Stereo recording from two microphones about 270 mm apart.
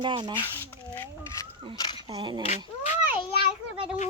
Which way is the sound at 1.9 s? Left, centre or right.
Centre.